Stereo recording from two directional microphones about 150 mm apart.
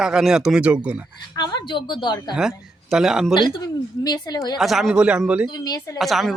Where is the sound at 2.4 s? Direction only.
5° right (ahead or behind).